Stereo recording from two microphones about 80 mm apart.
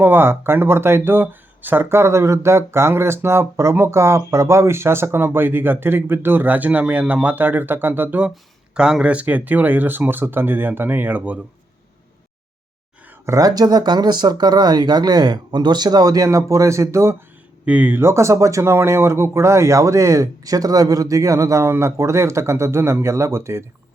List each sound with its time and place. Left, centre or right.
0.0 s speech: right
8.7 s speech: centre
13.2 s speech: right
17.7 s speech: right